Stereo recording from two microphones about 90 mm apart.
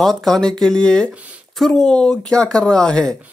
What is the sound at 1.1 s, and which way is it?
Speech, 15° right (ahead or behind).